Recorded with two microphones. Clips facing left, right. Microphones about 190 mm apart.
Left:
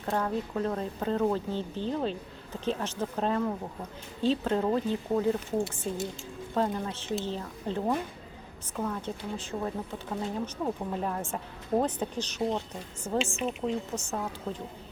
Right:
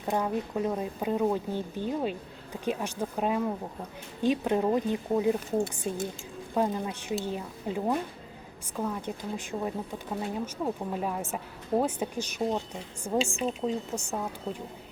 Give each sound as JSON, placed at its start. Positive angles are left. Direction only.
{"t": 0.0, "sound": "speech", "side_deg": -15}
{"t": 13.3, "sound": "a woman's voice", "side_deg": -30}
{"t": 13.9, "sound": "speech", "side_deg": -10}